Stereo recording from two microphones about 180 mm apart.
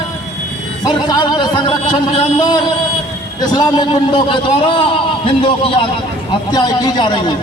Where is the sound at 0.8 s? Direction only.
20° left (ahead or behind).